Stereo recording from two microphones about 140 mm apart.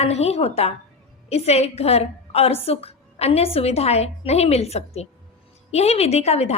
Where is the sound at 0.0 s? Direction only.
50° left (ahead or behind).